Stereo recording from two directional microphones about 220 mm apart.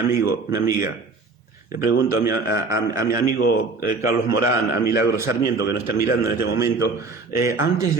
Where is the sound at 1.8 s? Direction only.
50° left (ahead or behind).